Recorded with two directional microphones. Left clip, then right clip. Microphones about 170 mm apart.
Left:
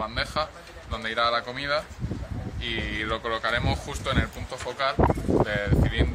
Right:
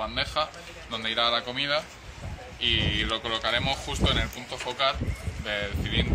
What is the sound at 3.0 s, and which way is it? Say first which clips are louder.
A man's voice: even; 15° left (ahead or behind).